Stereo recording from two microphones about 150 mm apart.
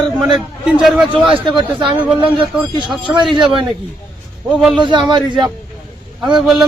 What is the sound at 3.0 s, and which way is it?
Speech, 30° right (ahead or behind).